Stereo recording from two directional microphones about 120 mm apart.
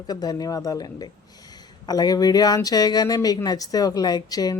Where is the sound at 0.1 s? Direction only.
35° left (ahead or behind).